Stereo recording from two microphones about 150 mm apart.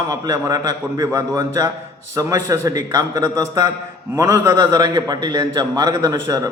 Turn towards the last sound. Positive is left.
turn(degrees=-25)  # may be behind; listen again after turning